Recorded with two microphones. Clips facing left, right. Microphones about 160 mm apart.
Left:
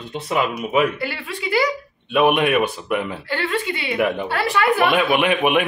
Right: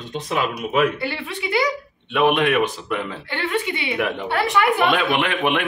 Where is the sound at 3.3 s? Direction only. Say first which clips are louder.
Even; 20° right (ahead or behind).